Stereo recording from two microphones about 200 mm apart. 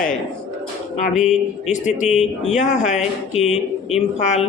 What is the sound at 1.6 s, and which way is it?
Speech, 35° left (ahead or behind).